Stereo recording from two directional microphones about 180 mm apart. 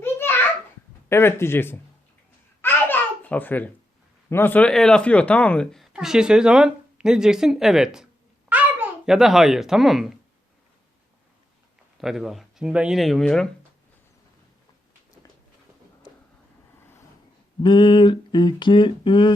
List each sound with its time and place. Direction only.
0.0 s a sound: 15° left (ahead or behind)
1.1 s speech: 15° left (ahead or behind)
2.6 s babbling: 10° left (ahead or behind)
4.3 s a child's voice: 10° left (ahead or behind)
11.9 s speech: centre (ahead or behind)
17.6 s a sound: 25° left (ahead or behind)